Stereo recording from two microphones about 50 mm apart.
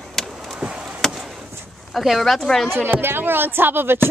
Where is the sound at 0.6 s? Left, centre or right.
Right.